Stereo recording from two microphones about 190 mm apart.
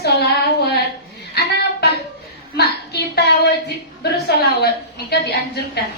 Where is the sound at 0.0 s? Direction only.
60° left (ahead or behind).